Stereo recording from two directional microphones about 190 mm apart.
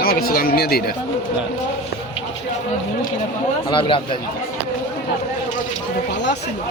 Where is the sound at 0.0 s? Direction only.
50° left (ahead or behind).